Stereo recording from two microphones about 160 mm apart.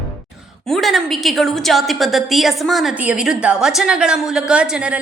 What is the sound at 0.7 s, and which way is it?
A woman's voice, centre (ahead or behind).